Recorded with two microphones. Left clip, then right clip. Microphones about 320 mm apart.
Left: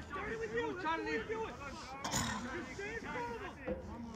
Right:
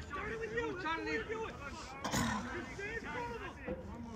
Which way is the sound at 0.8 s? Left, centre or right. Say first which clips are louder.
Even; centre.